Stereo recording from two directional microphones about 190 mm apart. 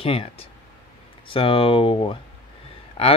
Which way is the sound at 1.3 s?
30° left (ahead or behind).